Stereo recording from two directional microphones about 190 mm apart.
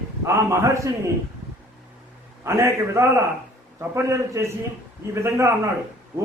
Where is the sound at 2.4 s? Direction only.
15° right (ahead or behind).